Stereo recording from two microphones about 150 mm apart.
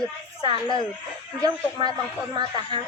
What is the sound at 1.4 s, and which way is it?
Speech, 25° right (ahead or behind).